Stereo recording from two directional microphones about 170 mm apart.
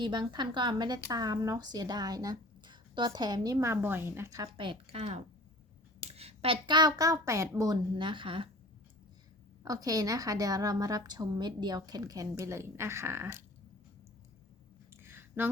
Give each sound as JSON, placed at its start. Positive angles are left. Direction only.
{"t": 0.0, "sound": "speech", "side_deg": -25}
{"t": 4.5, "sound": "speech", "side_deg": -30}
{"t": 9.6, "sound": "speech", "side_deg": -20}
{"t": 15.0, "sound": "a sound", "side_deg": -15}